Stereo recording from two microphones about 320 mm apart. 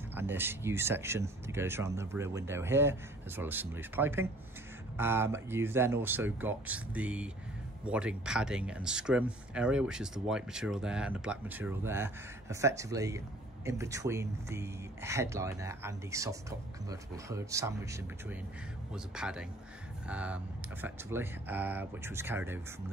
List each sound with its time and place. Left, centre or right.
0.1 s speech: centre